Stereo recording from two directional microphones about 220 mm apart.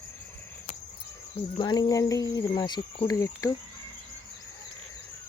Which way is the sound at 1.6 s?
20° left (ahead or behind).